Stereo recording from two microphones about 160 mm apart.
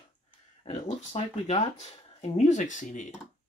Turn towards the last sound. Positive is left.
turn(degrees=50)  # may be behind; listen again after turning